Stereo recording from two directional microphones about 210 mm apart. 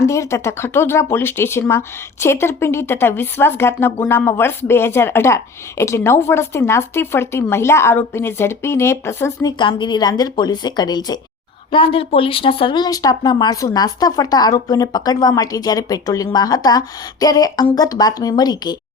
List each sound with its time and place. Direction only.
0.0 s speech: 15° left (ahead or behind)